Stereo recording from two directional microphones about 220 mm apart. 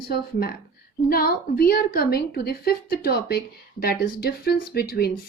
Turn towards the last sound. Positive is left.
turn(degrees=45)  # may be behind; listen again after turning